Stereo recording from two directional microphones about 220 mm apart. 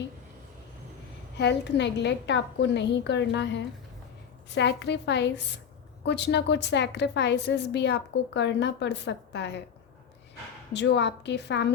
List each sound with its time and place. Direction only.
1.4 s a woman's voice: 50° left (ahead or behind)
10.7 s a woman's voice: 50° left (ahead or behind)